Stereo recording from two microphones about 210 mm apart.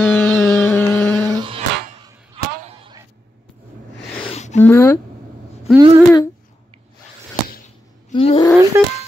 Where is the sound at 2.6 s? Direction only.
25° right (ahead or behind).